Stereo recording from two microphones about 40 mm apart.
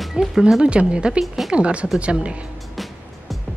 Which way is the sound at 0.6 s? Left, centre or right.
Right.